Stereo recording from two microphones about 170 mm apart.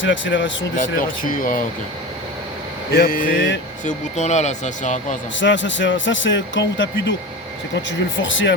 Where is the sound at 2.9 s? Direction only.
55° left (ahead or behind).